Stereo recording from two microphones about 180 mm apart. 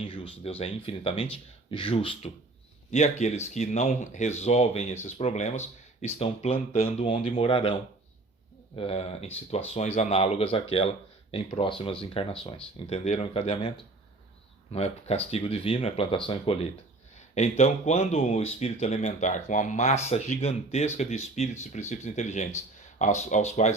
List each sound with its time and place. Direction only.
0.0 s speech: 30° left (ahead or behind)
17.2 s a sound: 40° left (ahead or behind)
17.6 s speech: 35° left (ahead or behind)